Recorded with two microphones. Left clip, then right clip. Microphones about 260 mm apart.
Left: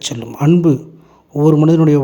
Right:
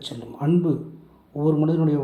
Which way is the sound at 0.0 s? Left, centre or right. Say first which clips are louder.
Left 10 dB; left.